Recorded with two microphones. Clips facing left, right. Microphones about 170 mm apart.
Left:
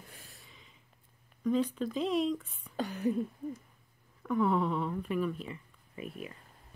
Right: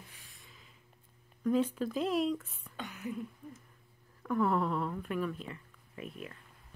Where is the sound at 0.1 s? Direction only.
40° left (ahead or behind).